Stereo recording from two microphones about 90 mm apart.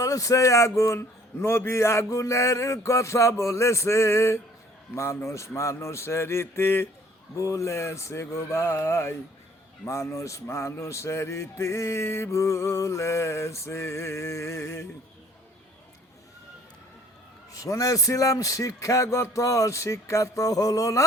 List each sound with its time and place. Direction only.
0.0 s speech: 40° left (ahead or behind)
7.3 s speech: 35° left (ahead or behind)
17.5 s speech: 40° left (ahead or behind)